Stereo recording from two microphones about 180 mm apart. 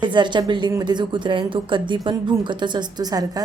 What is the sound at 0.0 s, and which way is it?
A woman's voice, 25° right (ahead or behind).